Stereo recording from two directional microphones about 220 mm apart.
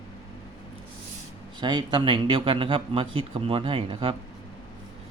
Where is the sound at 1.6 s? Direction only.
20° right (ahead or behind).